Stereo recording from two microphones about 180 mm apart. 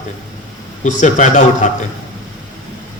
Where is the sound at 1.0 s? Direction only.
40° left (ahead or behind).